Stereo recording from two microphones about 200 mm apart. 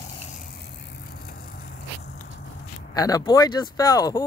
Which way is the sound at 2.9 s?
20° left (ahead or behind).